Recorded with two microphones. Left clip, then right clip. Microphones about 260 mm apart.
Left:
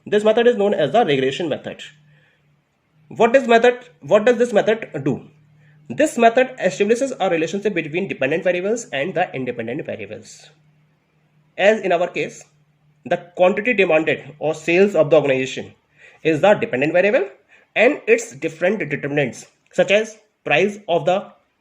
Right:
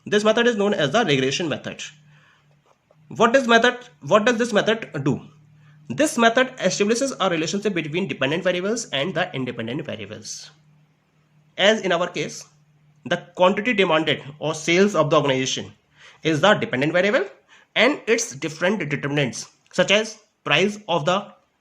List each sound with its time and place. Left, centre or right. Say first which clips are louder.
0.0 s a man's voice: left 3 dB; right
3.1 s a man's voice: left 2 dB; right
11.6 s a man's voice: left 3 dB; right